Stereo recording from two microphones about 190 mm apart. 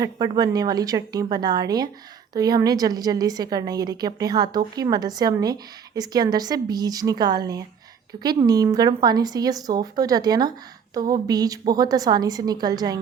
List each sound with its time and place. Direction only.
0.0 s a woman's voice: 20° right (ahead or behind)